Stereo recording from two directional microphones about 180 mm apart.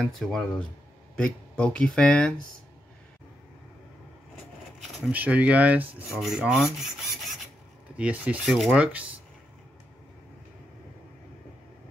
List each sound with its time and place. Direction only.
0.0 s speech: centre (ahead or behind)
5.0 s rub: 10° right (ahead or behind)